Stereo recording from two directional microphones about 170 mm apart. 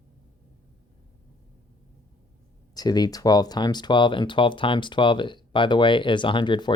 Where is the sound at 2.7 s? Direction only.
25° left (ahead or behind).